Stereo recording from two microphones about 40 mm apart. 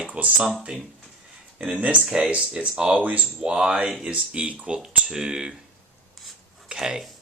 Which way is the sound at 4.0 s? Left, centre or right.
Right.